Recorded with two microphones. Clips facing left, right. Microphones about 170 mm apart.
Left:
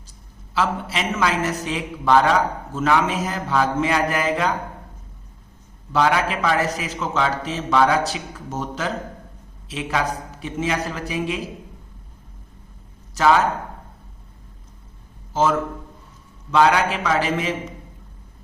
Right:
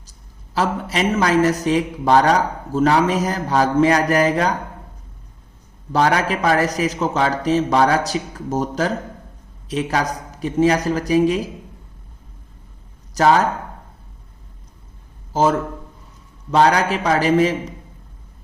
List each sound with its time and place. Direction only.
0.5 s a man's voice: 40° right (ahead or behind)
5.9 s a man's voice: 40° right (ahead or behind)
13.1 s a man's voice: 40° right (ahead or behind)
15.3 s a man's voice: 40° right (ahead or behind)